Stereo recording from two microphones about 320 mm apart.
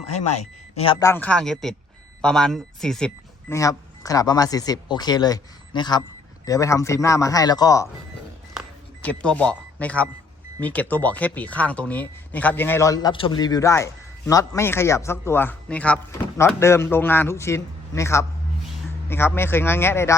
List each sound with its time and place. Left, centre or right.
0.2 s speech: left
0.9 s speech: centre
8.5 s a sound: centre
10.6 s speech: centre